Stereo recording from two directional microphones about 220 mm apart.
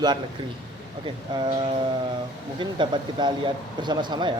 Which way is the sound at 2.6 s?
20° right (ahead or behind).